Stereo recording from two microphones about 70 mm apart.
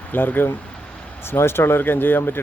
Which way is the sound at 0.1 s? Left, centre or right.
Left.